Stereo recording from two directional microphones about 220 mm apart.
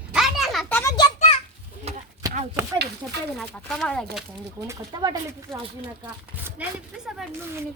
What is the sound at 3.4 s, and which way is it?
Speech, centre (ahead or behind).